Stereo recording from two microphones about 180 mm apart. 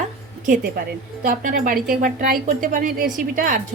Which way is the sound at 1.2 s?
50° right (ahead or behind).